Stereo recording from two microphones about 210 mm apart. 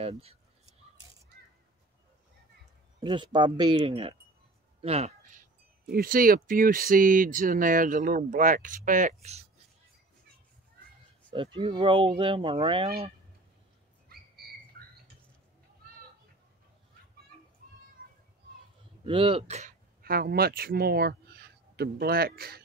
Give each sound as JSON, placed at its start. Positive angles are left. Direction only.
{"t": 0.0, "sound": "speech", "side_deg": -30}
{"t": 3.0, "sound": "speech", "side_deg": -20}
{"t": 4.8, "sound": "a sound", "side_deg": -30}
{"t": 5.9, "sound": "speech", "side_deg": -45}
{"t": 11.3, "sound": "speech", "side_deg": -25}
{"t": 19.0, "sound": "speech", "side_deg": -25}
{"t": 20.0, "sound": "speech", "side_deg": -45}